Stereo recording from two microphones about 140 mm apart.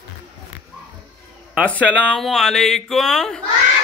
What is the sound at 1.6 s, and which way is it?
Speech, 10° left (ahead or behind).